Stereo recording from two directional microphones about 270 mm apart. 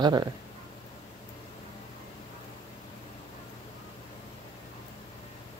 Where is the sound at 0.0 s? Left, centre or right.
Centre.